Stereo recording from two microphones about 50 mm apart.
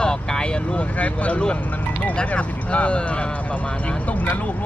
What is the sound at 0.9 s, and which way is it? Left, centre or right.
Speech, left.